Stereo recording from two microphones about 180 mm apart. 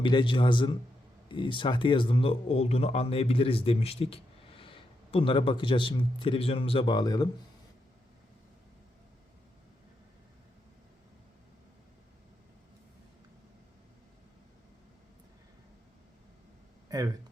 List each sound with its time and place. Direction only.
0.0 s speech: 25° left (ahead or behind)